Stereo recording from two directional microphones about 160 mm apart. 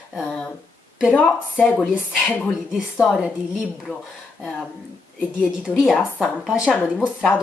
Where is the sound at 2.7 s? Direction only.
5° right (ahead or behind).